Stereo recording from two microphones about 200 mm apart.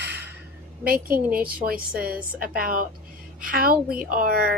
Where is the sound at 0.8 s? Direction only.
45° right (ahead or behind).